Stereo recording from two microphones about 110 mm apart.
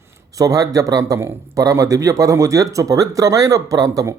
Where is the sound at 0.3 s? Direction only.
30° right (ahead or behind).